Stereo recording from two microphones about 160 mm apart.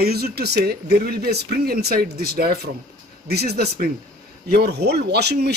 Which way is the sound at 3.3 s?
85° right.